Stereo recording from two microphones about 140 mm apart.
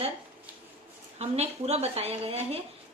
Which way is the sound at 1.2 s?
50° right (ahead or behind).